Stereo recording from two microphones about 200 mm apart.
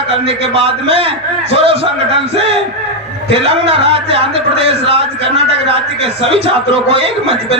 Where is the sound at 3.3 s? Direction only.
25° right (ahead or behind).